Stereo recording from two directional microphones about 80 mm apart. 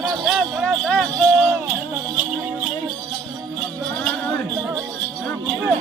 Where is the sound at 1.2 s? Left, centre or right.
Right.